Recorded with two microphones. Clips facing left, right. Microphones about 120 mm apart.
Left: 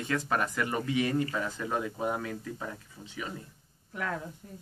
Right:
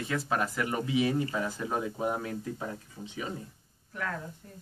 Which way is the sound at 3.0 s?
25° right (ahead or behind).